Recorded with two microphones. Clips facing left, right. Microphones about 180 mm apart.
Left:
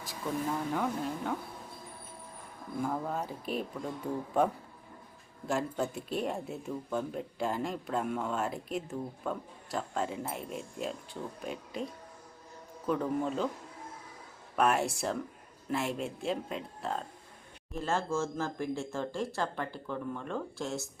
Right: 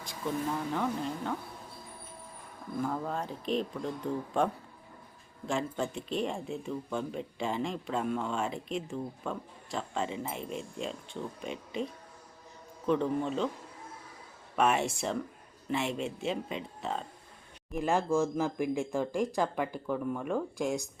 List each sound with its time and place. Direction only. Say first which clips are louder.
0.0 s speech: right 1 dB; 5° left (ahead or behind)
2.8 s speech: even; 5° left (ahead or behind)
5.5 s speech: even; 5° left (ahead or behind)
14.5 s speech: even; centre (ahead or behind)
17.7 s speech: right 4 dB; 15° right (ahead or behind)